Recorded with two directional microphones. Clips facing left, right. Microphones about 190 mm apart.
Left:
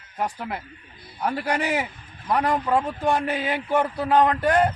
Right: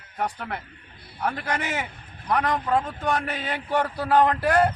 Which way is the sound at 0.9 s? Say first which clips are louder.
Left 1 dB; 60° right (ahead or behind).